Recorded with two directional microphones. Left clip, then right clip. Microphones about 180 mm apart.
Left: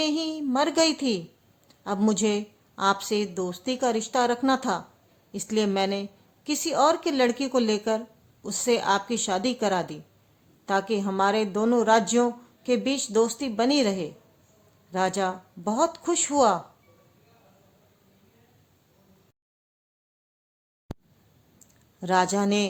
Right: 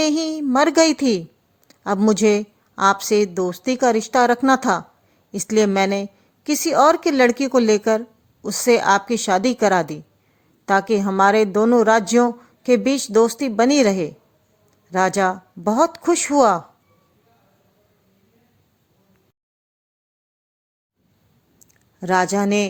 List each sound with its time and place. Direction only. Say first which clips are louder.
0.0 s a woman's voice: right 7 dB; 35° right (ahead or behind)
1.6 s a sound: right 8 dB; 40° right (ahead or behind)
2.0 s a woman's voice: right 9 dB; 35° right (ahead or behind)
22.0 s a woman's voice: right 5 dB; 25° right (ahead or behind)